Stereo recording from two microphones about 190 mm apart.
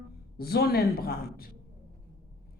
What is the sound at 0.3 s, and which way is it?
Speech, 55° left (ahead or behind).